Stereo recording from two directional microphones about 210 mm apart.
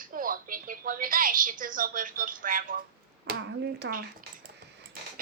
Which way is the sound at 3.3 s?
60° right (ahead or behind).